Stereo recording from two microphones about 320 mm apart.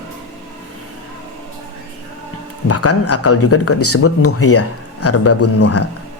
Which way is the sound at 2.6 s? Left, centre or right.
Left.